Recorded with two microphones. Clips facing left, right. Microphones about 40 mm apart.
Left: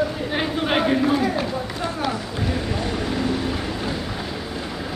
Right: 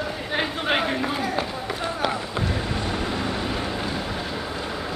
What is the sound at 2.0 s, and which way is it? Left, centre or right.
Run, centre.